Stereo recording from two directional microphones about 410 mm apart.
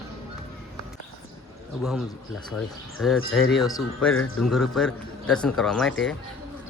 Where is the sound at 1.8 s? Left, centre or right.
Centre.